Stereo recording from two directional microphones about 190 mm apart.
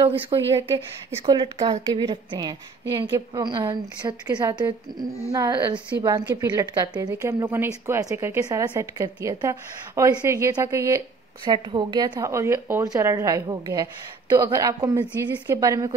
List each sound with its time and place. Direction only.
0.0 s speech: 30° right (ahead or behind)